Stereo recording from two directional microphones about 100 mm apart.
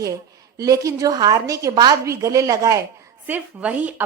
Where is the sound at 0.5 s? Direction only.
35° right (ahead or behind).